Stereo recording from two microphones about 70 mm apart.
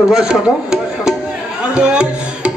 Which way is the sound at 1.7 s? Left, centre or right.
Centre.